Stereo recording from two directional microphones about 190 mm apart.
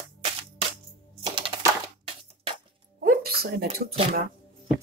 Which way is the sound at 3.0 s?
55° right (ahead or behind).